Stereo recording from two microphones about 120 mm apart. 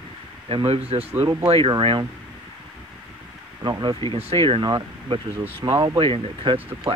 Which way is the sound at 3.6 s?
40° right (ahead or behind).